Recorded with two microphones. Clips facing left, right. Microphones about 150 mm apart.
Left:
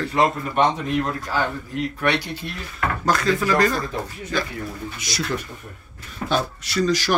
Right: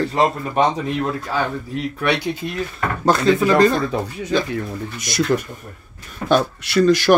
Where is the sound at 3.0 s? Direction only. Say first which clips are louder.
Right 6 dB; 25° right (ahead or behind).